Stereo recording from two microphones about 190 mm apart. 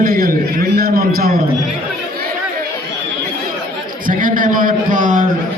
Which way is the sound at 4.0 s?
45° right (ahead or behind).